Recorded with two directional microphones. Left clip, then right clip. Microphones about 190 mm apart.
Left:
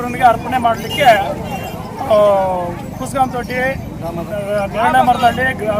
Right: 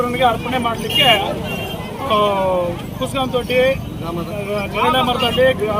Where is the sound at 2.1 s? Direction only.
20° left (ahead or behind).